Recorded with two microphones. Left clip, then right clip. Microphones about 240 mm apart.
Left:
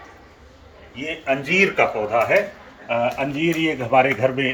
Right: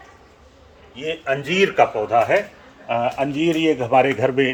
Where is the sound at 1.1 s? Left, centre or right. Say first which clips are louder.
Even; right.